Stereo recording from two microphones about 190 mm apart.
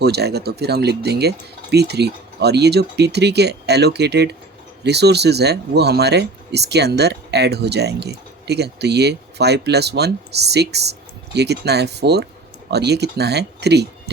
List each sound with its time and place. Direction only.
0.0 s speech: 60° right (ahead or behind)